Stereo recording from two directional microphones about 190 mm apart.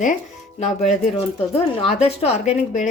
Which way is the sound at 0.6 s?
35° left (ahead or behind).